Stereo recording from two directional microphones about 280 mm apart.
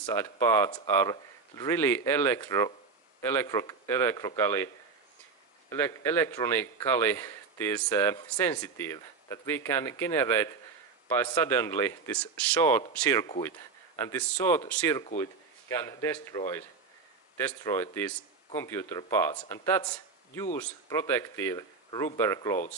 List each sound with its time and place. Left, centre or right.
0.0 s a man's voice: centre
5.7 s a man's voice: centre